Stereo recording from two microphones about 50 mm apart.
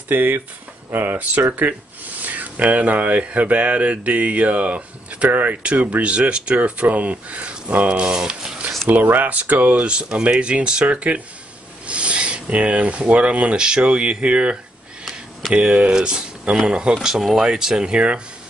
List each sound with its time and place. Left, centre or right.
0.1 s speech: right
8.2 s speech: centre
8.8 s speech: right
15.4 s speech: centre
15.9 s speech: centre